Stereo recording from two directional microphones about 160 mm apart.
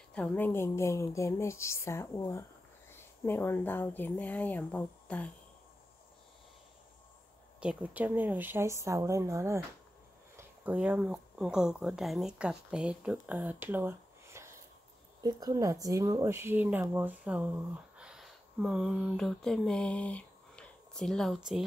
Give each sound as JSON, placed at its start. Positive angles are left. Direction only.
{"t": 0.1, "sound": "speech", "side_deg": 10}
{"t": 7.6, "sound": "a woman's voice", "side_deg": -10}